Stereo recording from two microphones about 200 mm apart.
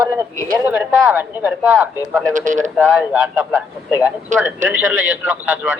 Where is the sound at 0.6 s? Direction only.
5° right (ahead or behind).